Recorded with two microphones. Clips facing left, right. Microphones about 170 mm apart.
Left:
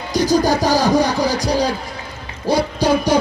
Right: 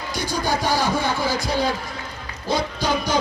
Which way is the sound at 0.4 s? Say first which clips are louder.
Left 6 dB; 40° left (ahead or behind).